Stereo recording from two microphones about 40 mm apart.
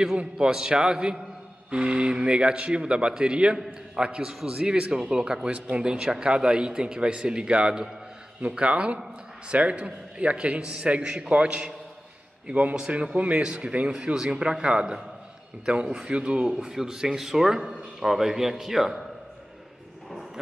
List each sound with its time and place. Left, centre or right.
0.4 s a man's voice: centre